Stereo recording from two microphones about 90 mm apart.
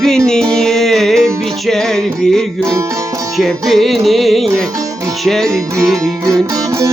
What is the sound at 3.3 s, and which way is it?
Music, centre (ahead or behind).